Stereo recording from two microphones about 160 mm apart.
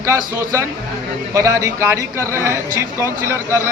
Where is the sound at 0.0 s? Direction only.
20° right (ahead or behind).